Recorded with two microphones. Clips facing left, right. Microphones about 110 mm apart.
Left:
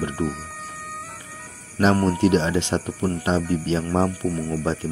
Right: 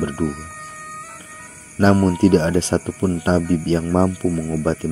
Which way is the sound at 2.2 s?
35° right (ahead or behind).